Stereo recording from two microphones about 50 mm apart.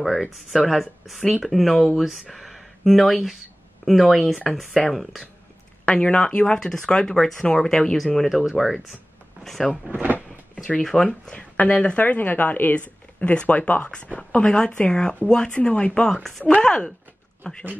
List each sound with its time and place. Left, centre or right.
0.0 s speech: centre
5.9 s speech: centre
9.8 s speech: right
10.8 s speech: centre
11.3 s speech: left
12.0 s speech: left
13.2 s speech: left
16.1 s speech: centre